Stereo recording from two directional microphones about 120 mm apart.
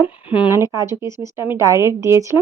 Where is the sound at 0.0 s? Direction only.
15° right (ahead or behind).